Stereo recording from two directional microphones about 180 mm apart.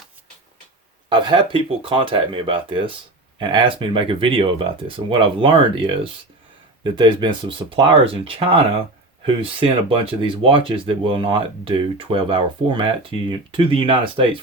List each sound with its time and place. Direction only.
1.1 s speech: 25° right (ahead or behind)